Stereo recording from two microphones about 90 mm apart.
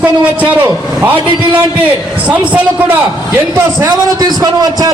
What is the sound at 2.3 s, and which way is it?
Speech, 15° right (ahead or behind).